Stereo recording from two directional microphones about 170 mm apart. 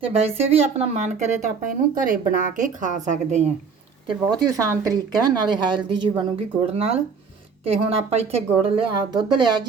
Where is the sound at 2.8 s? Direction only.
50° right (ahead or behind).